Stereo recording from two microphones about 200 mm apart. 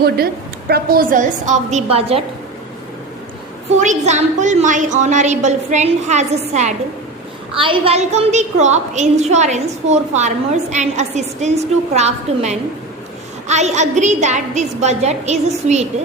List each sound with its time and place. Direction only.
0.7 s a woman's voice: 45° right (ahead or behind); by 2.2 s 30° right (ahead or behind)
3.8 s a woman's voice: 35° right (ahead or behind)